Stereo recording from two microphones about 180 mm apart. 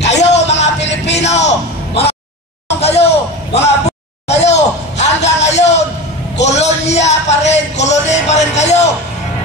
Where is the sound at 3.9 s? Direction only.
35° left (ahead or behind).